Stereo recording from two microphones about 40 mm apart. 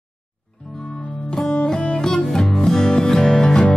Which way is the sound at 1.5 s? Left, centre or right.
Left.